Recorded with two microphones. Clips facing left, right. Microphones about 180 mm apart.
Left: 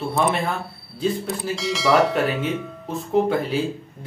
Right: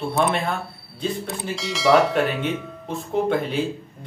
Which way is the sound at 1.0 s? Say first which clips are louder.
Left 3 dB; centre (ahead or behind).